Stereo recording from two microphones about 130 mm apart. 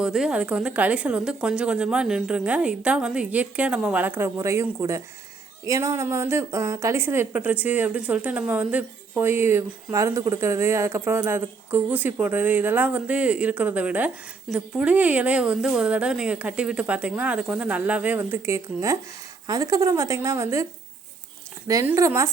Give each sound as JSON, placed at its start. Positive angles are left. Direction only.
{"t": 0.0, "sound": "a woman's voice", "side_deg": -5}
{"t": 21.9, "sound": "speech", "side_deg": -25}